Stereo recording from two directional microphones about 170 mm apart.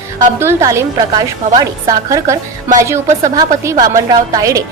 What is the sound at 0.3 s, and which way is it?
A woman's voice, 15° right (ahead or behind).